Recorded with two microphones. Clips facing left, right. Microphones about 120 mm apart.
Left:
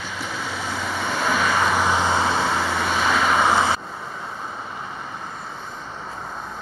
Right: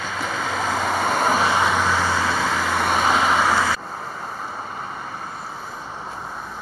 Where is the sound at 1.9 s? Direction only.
20° left (ahead or behind).